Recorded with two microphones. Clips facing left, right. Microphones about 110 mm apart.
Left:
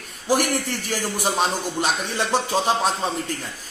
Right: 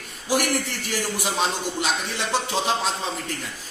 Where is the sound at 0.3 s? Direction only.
45° left (ahead or behind).